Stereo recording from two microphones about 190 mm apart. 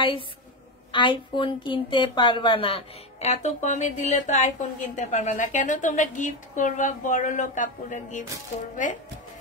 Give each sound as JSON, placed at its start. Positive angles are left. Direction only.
{"t": 0.9, "sound": "a woman's voice", "side_deg": 25}